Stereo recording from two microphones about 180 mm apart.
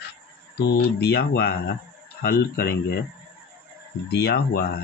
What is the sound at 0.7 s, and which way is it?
Speech, 65° left (ahead or behind).